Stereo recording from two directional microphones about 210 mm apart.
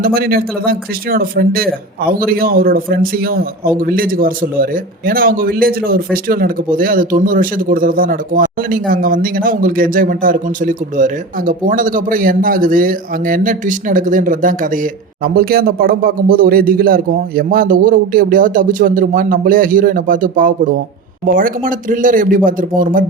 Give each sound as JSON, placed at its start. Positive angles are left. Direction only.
{"t": 0.0, "sound": "a man's voice", "side_deg": -45}